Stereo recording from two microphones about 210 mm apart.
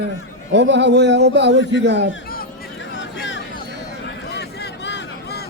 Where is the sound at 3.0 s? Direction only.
60° left (ahead or behind).